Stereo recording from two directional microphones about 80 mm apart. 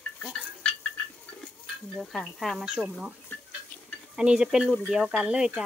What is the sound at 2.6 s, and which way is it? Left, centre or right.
Speech, centre.